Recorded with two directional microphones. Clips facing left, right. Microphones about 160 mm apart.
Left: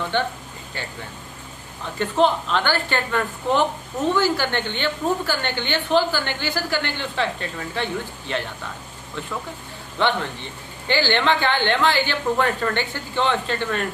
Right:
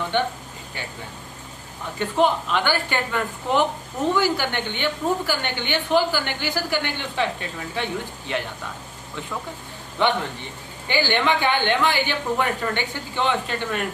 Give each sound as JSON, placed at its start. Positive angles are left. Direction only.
{"t": 0.1, "sound": "a woman's voice", "side_deg": -15}
{"t": 2.0, "sound": "a woman's voice", "side_deg": -10}
{"t": 10.0, "sound": "a woman's voice", "side_deg": -15}